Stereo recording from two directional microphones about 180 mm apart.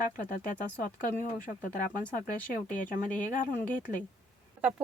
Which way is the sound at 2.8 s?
45° left (ahead or behind).